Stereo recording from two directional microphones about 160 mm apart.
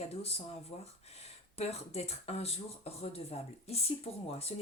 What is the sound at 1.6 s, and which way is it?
Speech, 40° left (ahead or behind).